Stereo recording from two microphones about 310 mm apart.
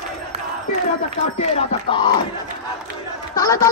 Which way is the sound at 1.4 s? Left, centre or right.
Centre.